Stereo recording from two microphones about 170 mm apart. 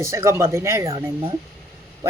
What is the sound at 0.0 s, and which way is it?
Speech, 15° right (ahead or behind).